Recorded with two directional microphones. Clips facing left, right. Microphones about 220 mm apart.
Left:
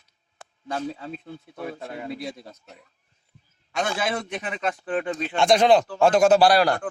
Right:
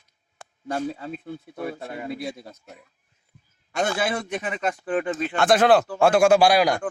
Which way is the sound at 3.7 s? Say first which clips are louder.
Right 2 dB; 50° right (ahead or behind).